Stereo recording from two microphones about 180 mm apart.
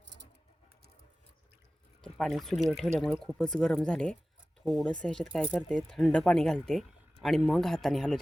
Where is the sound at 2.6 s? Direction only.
Centre (ahead or behind).